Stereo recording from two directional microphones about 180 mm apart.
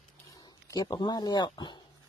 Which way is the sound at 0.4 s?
25° left (ahead or behind).